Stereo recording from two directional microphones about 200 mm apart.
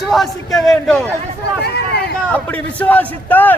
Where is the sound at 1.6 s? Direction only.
55° left (ahead or behind).